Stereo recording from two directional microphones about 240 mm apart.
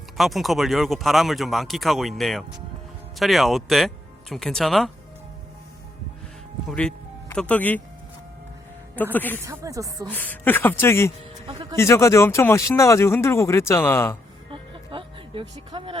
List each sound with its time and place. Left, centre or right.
0.2 s speech: centre
6.7 s speech: centre
9.1 s speech: centre
9.5 s speech: centre
10.1 s speech: centre
11.4 s speech: centre
11.8 s speech: centre
14.5 s music: right